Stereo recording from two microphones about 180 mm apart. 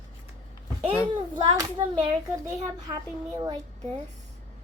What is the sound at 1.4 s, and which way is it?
A child's voice, 20° right (ahead or behind).